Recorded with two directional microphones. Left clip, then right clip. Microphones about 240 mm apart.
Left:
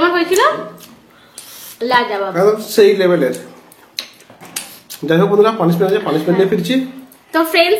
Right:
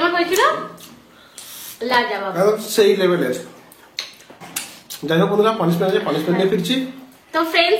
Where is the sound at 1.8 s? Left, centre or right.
Left.